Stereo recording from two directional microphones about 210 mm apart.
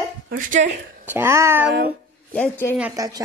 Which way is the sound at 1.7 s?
45° right (ahead or behind).